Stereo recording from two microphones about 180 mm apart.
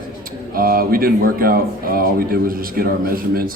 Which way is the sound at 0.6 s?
55° right (ahead or behind).